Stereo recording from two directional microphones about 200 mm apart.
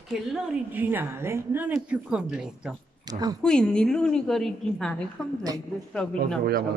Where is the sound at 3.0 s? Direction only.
20° right (ahead or behind).